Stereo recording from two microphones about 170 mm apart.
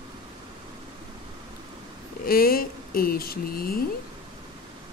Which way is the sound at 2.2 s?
60° left (ahead or behind).